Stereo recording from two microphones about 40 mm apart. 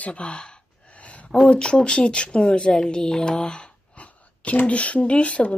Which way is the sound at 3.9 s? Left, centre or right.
Left.